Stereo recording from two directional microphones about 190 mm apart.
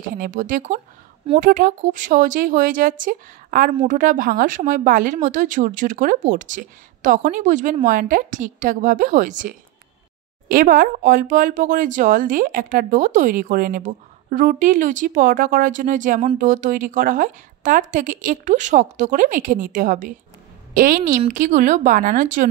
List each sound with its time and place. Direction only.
0.2 s speech: 45° right (ahead or behind)